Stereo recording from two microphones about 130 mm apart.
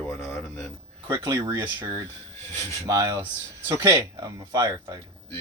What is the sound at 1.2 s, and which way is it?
Speech, 30° right (ahead or behind).